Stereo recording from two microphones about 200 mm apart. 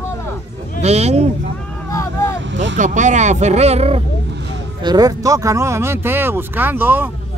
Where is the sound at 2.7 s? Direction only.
40° right (ahead or behind).